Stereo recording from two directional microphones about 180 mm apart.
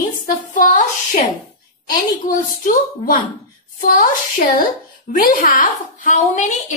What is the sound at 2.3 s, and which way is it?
A woman's voice, 50° left (ahead or behind).